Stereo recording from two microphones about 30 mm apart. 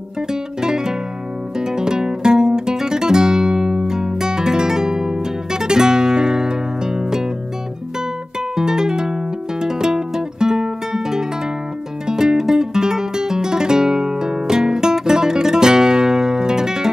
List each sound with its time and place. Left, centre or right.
0.3 s music: right
8.5 s music: right